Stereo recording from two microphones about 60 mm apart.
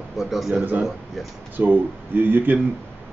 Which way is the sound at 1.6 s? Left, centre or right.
Right.